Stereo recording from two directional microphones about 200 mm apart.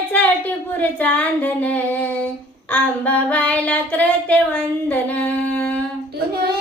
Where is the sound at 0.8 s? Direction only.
5° left (ahead or behind).